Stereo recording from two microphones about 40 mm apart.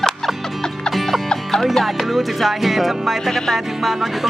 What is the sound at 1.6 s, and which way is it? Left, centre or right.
Speech, centre.